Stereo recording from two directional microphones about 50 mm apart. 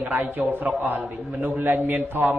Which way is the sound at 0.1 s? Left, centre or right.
Right.